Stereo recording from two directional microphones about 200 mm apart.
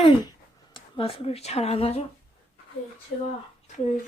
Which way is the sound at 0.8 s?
25° left (ahead or behind).